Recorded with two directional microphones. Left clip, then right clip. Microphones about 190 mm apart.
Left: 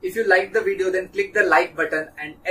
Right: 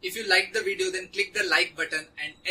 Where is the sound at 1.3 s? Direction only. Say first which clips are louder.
Left 8 dB; 20° right (ahead or behind).